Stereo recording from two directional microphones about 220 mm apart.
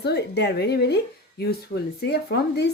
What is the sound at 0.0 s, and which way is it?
Speech, 50° left (ahead or behind).